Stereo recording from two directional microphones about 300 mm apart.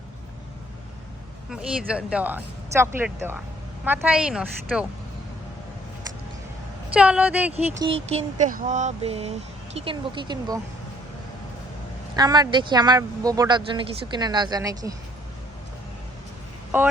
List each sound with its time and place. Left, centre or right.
1.5 s speech: centre
6.9 s speech: centre
7.5 s a sound: centre
9.7 s speech: centre
12.1 s speech: centre
16.7 s speech: centre